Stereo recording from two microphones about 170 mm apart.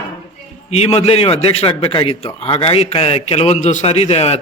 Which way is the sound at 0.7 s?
40° left (ahead or behind).